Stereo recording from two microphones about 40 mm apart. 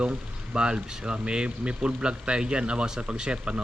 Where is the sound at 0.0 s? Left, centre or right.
Right.